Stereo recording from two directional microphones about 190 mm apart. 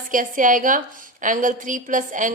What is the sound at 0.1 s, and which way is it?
A woman's voice, 45° right (ahead or behind).